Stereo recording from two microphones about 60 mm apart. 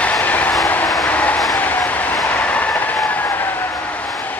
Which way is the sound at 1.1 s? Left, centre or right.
Left.